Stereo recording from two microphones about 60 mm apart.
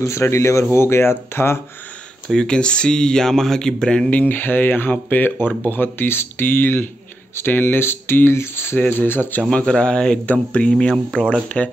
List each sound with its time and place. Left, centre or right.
0.0 s speech: left
2.2 s speech: centre
4.2 s speech: left
8.7 s speech: left
9.4 s speech: centre